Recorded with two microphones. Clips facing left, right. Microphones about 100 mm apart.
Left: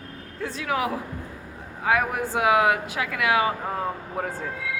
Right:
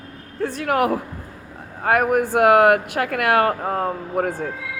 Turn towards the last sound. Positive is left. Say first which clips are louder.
# right 7 dB
turn(degrees=-55)  # may be behind; listen again after turning